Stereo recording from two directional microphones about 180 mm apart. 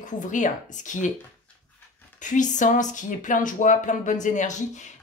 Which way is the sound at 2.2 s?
45° left (ahead or behind).